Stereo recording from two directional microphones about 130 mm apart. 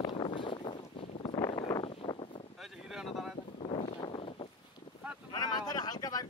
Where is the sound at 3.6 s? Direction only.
50° left (ahead or behind).